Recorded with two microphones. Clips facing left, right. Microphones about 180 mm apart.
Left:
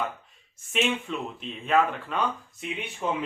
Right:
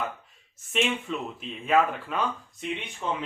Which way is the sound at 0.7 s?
Centre (ahead or behind).